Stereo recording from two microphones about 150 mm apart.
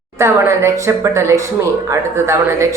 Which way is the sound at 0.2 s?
20° right (ahead or behind).